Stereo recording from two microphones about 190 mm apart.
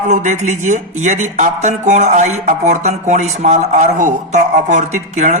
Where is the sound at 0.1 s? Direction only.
40° right (ahead or behind).